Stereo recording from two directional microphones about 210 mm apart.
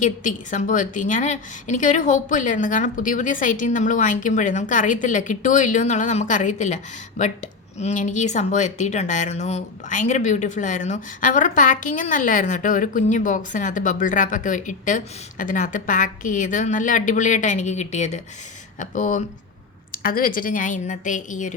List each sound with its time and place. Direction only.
0.0 s speech: 35° left (ahead or behind)